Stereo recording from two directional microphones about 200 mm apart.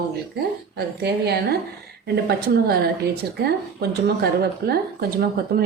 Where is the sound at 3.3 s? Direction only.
55° right (ahead or behind).